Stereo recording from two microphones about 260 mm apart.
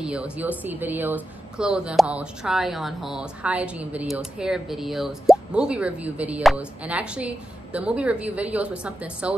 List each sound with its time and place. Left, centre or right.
0.0 s speech: centre